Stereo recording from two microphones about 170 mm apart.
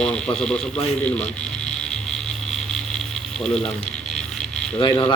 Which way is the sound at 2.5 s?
5° left (ahead or behind).